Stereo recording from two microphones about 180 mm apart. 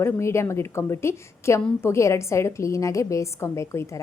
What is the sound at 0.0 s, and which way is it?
A woman's voice, 15° left (ahead or behind).